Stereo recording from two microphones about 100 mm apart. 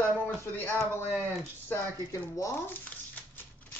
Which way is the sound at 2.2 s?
25° left (ahead or behind).